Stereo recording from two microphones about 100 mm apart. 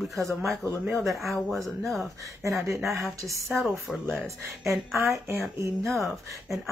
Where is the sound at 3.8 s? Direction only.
Centre (ahead or behind).